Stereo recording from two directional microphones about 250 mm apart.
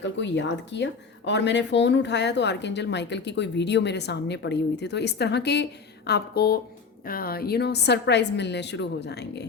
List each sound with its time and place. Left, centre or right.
0.0 s a woman's voice: left